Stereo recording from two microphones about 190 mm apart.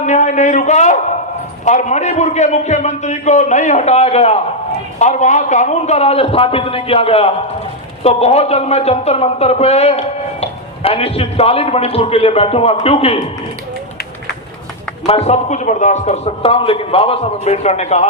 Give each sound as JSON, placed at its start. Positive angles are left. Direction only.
{"t": 0.0, "sound": "a man's voice", "side_deg": 40}
{"t": 15.0, "sound": "a man's voice", "side_deg": 30}